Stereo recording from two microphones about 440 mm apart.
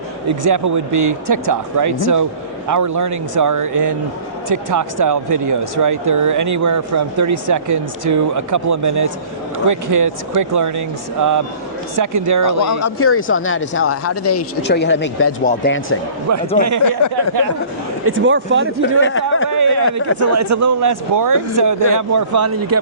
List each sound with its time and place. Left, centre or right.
0.3 s speech: right
12.8 s speech: left
16.6 s speech: right
17.0 s speech: left
18.0 s speech: right
18.8 s speech: left
19.5 s a sound: right
20.2 s speech: right